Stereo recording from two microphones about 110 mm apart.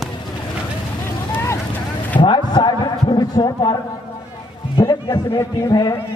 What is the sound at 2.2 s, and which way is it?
A man's voice, 45° left (ahead or behind).